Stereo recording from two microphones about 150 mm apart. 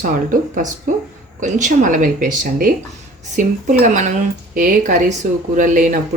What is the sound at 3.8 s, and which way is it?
Speech, 55° right (ahead or behind).